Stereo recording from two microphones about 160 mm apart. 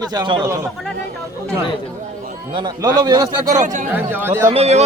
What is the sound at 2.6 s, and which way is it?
Speech, 25° right (ahead or behind).